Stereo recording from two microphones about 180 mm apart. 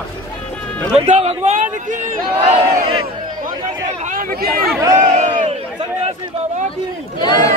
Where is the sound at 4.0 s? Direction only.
50° right (ahead or behind).